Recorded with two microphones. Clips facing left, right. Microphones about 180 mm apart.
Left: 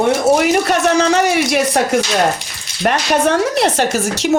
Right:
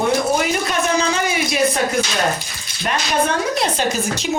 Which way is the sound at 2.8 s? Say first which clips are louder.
Left 5 dB; 70° left (ahead or behind).